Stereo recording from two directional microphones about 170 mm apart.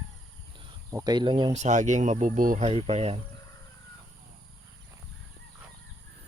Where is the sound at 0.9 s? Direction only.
20° right (ahead or behind).